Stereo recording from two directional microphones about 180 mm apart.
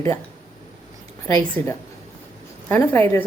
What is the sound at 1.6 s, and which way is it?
A woman's voice, 15° left (ahead or behind).